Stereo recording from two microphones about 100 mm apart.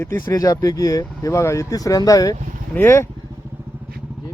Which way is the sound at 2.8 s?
25° left (ahead or behind).